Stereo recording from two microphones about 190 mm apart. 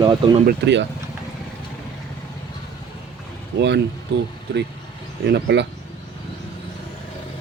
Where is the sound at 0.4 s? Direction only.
65° right (ahead or behind).